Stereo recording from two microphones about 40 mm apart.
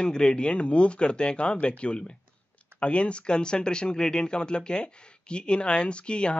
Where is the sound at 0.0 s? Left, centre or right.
Left.